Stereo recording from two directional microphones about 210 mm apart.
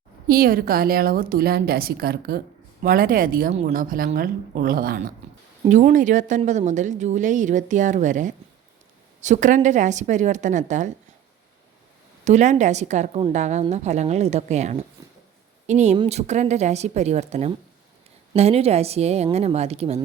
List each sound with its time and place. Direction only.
0.3 s a woman's voice: 45° right (ahead or behind)
12.2 s a woman's voice: 35° right (ahead or behind)